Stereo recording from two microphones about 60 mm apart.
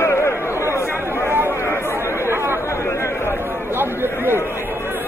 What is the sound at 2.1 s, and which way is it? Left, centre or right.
Chatter, right.